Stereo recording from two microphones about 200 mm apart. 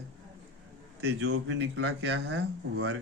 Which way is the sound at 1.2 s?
75° right (ahead or behind).